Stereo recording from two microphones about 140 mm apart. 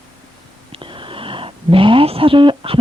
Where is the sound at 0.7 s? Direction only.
35° right (ahead or behind).